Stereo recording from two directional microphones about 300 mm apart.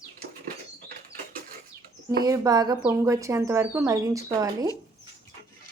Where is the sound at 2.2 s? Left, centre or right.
Centre.